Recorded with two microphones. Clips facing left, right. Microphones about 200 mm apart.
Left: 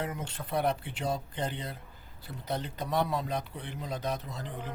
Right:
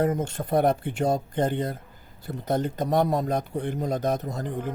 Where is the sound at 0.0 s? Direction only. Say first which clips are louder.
Right 11 dB; 45° right (ahead or behind).